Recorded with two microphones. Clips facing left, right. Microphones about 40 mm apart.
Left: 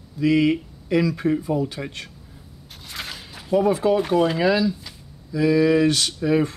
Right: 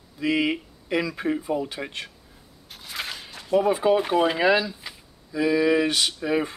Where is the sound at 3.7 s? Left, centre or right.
Centre.